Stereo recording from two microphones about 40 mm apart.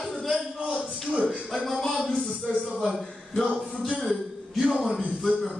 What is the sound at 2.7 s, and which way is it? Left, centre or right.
Speech, centre.